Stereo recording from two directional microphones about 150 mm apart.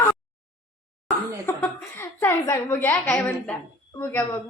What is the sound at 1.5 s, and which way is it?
A woman's voice, 15° left (ahead or behind).